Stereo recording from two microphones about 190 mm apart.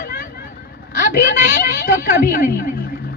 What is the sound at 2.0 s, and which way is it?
Speech, 50° left (ahead or behind).